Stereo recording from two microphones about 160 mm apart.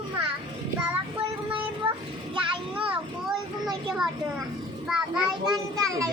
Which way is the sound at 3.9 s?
Centre (ahead or behind).